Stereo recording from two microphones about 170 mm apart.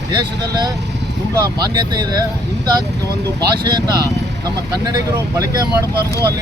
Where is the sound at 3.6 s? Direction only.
25° right (ahead or behind).